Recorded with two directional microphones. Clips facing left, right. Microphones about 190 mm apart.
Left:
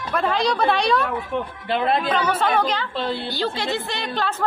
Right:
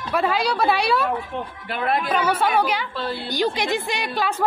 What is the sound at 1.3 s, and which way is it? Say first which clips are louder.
Speech: left 4 dB; 60° left (ahead or behind).